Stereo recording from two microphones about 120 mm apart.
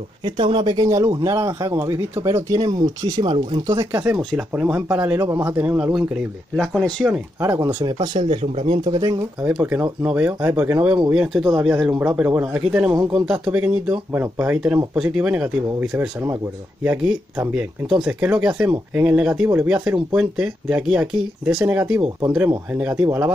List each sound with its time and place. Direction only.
0.2 s speech: 45° right (ahead or behind)
3.7 s speech: 20° right (ahead or behind)
4.2 s speech: 5° left (ahead or behind)
4.5 s speech: 15° right (ahead or behind)
6.5 s speech: 5° left (ahead or behind)
7.3 s speech: 20° right (ahead or behind)
7.8 s speech: 35° right (ahead or behind); by 8.8 s 55° right (ahead or behind)
8.8 s speech: 35° right (ahead or behind)
9.4 s speech: 15° right (ahead or behind)
11.1 s speech: 5° right (ahead or behind)
19.4 s speech: 20° right (ahead or behind)